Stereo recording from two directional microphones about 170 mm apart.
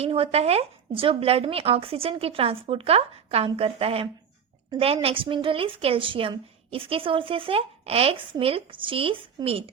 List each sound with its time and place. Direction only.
0.0 s a woman's voice: 35° right (ahead or behind)